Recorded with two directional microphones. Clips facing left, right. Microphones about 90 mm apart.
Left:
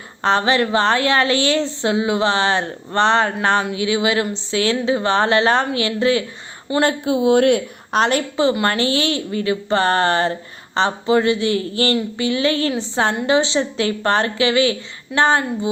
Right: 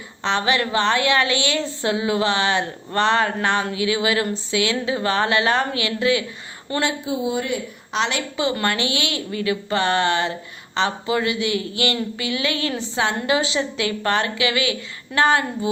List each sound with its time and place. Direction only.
0.2 s a woman's voice: 35° left (ahead or behind)
6.8 s speech: 65° left (ahead or behind)
7.9 s a woman's voice: 45° left (ahead or behind); by 15.7 s 30° left (ahead or behind)